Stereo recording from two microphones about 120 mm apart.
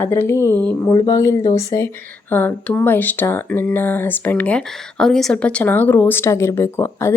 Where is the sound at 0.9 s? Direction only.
30° left (ahead or behind).